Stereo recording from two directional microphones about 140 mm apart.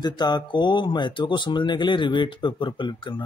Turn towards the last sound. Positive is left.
turn(degrees=35)  # may be behind; listen again after turning